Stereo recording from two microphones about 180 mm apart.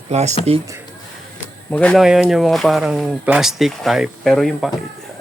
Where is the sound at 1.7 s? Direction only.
5° left (ahead or behind).